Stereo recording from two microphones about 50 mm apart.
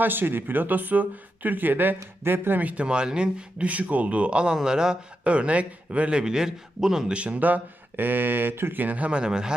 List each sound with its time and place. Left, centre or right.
0.0 s speech: right
2.6 s speech: right
2.8 s speech: centre
3.7 s speech: right; by 7.1 s centre
7.1 s speech: right
8.8 s speech: right; by 9.6 s centre